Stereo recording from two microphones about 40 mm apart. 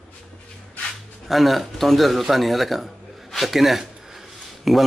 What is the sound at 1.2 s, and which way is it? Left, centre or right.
A man's voice, centre.